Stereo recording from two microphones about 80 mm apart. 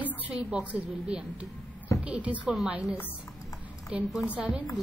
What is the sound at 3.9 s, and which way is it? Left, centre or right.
Speech, centre.